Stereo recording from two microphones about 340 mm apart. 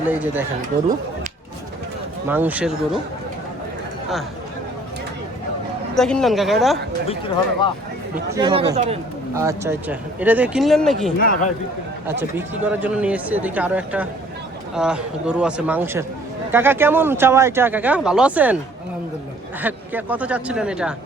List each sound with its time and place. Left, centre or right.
0.1 s speech: centre
2.2 s speech: centre
5.9 s speech: centre
8.3 s speech: centre
11.2 s speech: left
12.3 s speech: centre
19.6 s speech: centre